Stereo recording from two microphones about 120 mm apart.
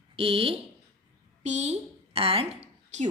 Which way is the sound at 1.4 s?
70° right (ahead or behind).